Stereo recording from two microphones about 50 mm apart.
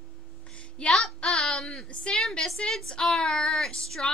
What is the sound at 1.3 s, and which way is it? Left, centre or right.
A woman's voice, centre.